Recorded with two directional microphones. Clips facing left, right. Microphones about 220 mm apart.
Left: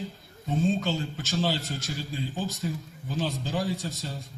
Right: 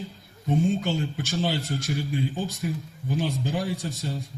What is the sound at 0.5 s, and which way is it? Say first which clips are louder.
Speech: right 2 dB; 15° right (ahead or behind).